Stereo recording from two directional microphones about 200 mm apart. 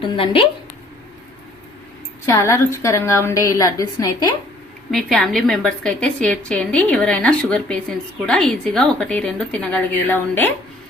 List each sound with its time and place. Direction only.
0.0 s a woman's voice: 25° left (ahead or behind)
2.2 s a woman's voice: 15° left (ahead or behind)
4.9 s a woman's voice: centre (ahead or behind)